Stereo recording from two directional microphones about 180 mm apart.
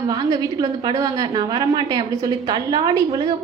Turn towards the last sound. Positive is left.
turn(degrees=-25)  # may be behind; listen again after turning